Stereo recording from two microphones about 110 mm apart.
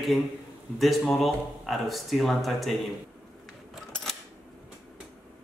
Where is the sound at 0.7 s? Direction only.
Centre (ahead or behind).